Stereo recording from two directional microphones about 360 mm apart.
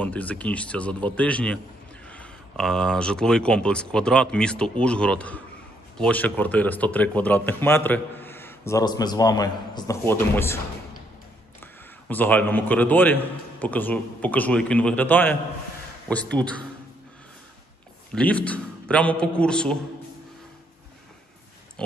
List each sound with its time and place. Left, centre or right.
0.0 s a man's voice: centre
11.6 s speech: centre
18.1 s speech: centre
21.8 s a sound: centre